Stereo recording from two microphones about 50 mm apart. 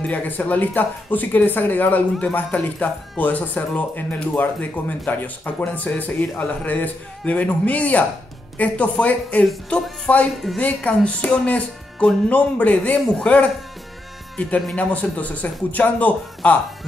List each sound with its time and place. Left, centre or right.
0.0 s a man's voice: left